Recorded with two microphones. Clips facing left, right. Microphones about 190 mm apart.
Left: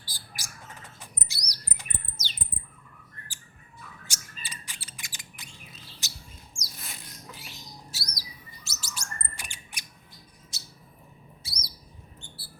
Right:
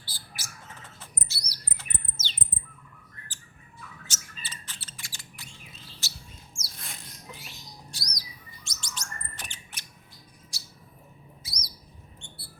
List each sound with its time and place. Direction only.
0.1 s bird: 15° left (ahead or behind)
4.0 s bird: 10° left (ahead or behind)
7.9 s bird: 5° left (ahead or behind)
8.6 s chirp: 5° left (ahead or behind)
10.5 s bird: 20° left (ahead or behind)